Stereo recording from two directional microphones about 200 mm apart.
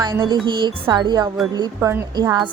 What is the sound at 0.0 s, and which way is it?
Speech, 20° right (ahead or behind).